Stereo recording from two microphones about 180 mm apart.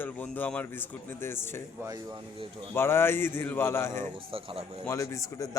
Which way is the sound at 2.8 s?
15° left (ahead or behind).